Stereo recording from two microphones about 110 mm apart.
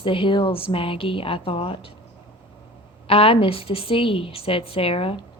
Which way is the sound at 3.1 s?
60° left (ahead or behind).